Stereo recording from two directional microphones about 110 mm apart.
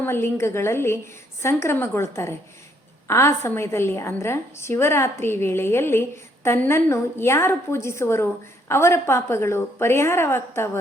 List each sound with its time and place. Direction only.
0.0 s a woman's voice: 20° left (ahead or behind)